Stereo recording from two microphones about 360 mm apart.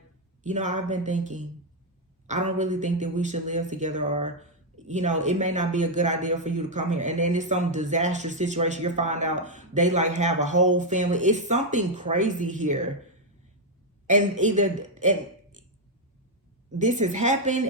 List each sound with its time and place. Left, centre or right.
0.4 s speech: centre
14.1 s speech: centre
16.7 s speech: centre